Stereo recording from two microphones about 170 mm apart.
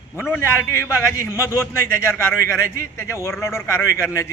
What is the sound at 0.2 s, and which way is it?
A man's voice, 10° left (ahead or behind).